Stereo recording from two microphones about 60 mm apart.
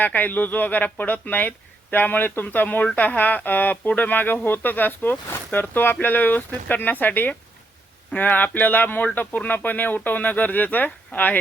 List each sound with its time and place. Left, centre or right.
0.0 s speech: left